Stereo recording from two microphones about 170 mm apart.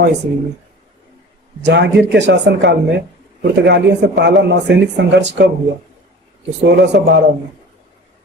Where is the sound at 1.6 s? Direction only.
90° right.